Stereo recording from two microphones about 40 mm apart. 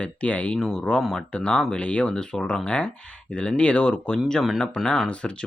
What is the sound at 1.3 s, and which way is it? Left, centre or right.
Speech, left.